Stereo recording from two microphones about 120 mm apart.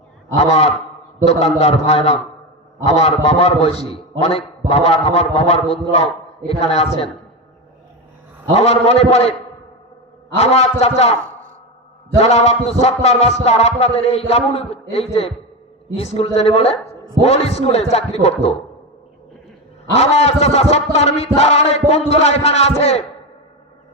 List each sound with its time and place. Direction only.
0.3 s music: 65° left (ahead or behind)
8.5 s music: 60° left (ahead or behind)
10.3 s music: 60° left (ahead or behind)
12.2 s music: 65° left (ahead or behind)
20.0 s music: 60° left (ahead or behind)